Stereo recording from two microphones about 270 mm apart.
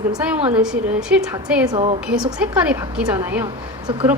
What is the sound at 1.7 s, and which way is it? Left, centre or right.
Speech, right.